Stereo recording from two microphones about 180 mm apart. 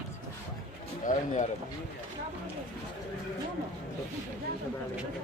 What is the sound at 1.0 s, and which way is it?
Speech, 45° left (ahead or behind).